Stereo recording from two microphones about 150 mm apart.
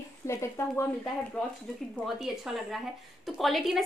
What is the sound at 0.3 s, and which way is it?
Speech, 15° left (ahead or behind).